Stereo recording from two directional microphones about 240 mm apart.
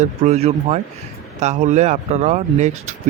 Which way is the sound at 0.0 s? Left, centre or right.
Right.